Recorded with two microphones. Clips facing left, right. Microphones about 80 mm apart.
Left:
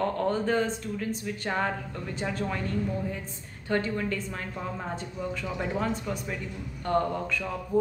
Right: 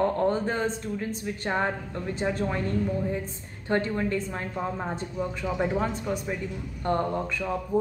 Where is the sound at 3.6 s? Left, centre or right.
Right.